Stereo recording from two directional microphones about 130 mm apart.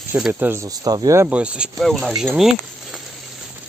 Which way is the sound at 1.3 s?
10° right (ahead or behind).